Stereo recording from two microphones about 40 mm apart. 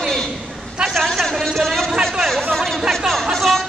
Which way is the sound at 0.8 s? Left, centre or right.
Right.